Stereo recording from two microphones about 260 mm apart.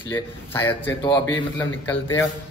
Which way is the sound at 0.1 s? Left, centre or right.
Centre.